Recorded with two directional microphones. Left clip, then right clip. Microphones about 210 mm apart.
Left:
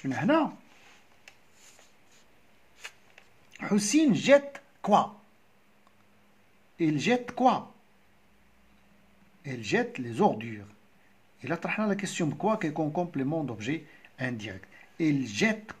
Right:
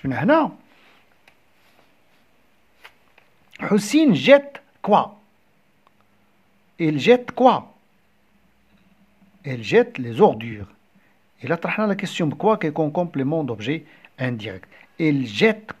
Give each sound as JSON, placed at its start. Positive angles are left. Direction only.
{"t": 0.0, "sound": "speech", "side_deg": -30}
{"t": 3.5, "sound": "speech", "side_deg": -35}
{"t": 6.8, "sound": "speech", "side_deg": -30}
{"t": 9.4, "sound": "speech", "side_deg": -30}